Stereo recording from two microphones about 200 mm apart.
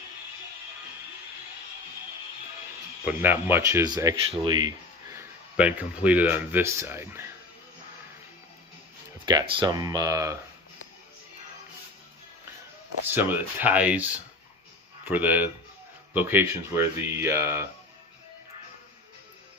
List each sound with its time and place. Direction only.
3.1 s speech: 10° right (ahead or behind)
9.2 s speech: 25° right (ahead or behind)
13.1 s speech: 10° right (ahead or behind)